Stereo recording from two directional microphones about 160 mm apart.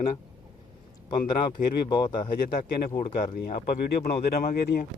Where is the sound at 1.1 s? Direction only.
30° left (ahead or behind).